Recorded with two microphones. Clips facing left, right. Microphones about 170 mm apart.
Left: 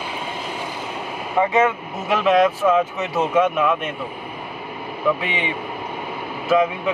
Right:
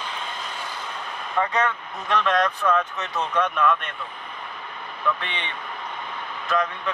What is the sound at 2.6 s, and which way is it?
Speech, 20° left (ahead or behind).